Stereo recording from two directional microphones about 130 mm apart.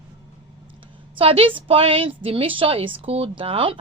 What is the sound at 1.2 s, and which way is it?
A woman's voice, 45° right (ahead or behind).